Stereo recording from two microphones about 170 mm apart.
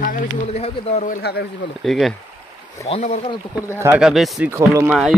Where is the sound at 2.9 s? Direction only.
35° left (ahead or behind).